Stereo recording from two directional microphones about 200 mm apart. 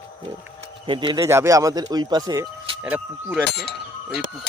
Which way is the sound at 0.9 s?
25° right (ahead or behind).